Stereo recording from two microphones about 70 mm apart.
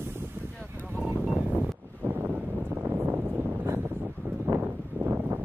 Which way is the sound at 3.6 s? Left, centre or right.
Right.